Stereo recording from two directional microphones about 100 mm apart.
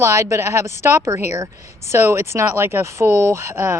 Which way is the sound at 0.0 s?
30° right (ahead or behind).